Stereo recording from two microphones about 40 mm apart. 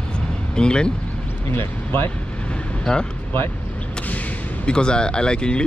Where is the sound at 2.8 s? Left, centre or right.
Left.